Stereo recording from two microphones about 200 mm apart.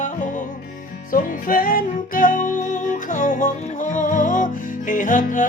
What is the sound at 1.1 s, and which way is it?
Music, 45° left (ahead or behind).